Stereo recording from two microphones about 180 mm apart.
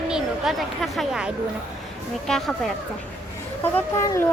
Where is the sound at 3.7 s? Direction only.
15° left (ahead or behind).